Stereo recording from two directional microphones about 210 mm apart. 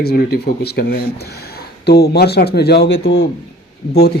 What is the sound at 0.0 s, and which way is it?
A man's voice, 50° left (ahead or behind).